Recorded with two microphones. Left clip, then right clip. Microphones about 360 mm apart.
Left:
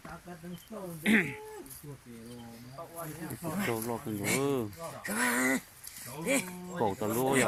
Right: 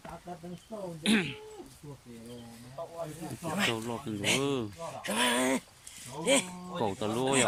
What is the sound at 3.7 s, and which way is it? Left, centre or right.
Speech, centre.